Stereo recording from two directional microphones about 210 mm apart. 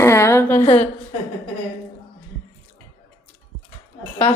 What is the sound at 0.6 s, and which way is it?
Speech, 30° left (ahead or behind).